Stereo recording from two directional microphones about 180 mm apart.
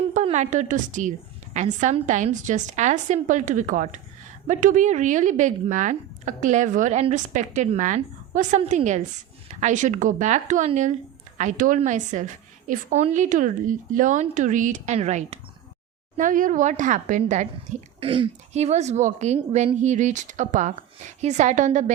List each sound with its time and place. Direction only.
0.1 s a woman's voice: 40° right (ahead or behind)